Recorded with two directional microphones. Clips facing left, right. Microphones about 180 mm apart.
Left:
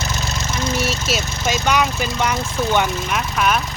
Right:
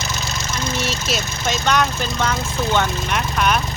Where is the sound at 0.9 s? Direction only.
5° left (ahead or behind).